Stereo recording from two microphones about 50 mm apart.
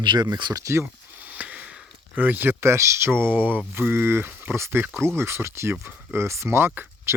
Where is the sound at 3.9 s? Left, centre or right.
Right.